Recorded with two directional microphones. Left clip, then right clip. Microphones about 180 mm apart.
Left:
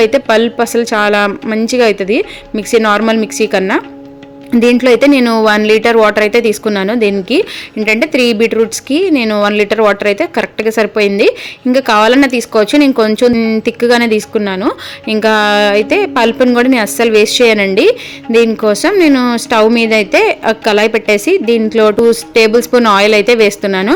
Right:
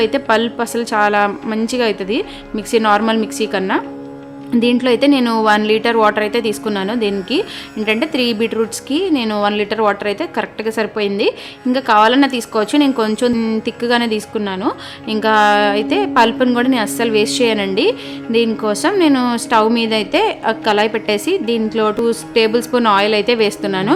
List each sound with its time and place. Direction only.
0.0 s speech: 20° left (ahead or behind)